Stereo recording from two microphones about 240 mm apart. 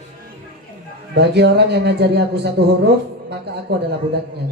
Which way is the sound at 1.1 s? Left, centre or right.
Right.